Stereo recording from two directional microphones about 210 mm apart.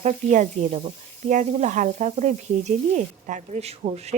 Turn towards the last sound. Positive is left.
turn(degrees=-30)  # may be behind; listen again after turning